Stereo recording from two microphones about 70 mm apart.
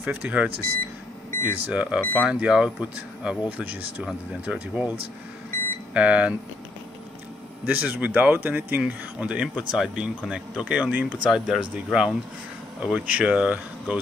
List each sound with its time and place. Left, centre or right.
0.0 s speech: right
5.9 s speech: centre
7.6 s speech: right
9.3 s speech: centre
11.2 s speech: centre